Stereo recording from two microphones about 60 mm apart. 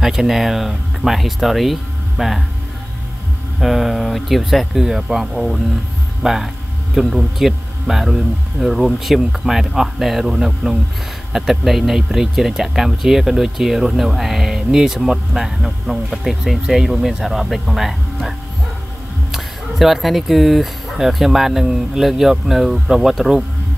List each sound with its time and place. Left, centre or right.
0.0 s speech: centre
3.6 s speech: centre
19.3 s speech: centre